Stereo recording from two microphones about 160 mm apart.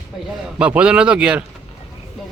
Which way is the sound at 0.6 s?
5° right (ahead or behind).